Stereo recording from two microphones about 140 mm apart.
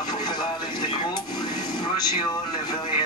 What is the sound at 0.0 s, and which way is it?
Television, 30° left (ahead or behind).